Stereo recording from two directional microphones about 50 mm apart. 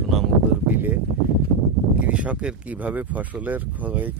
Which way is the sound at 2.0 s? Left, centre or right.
Right.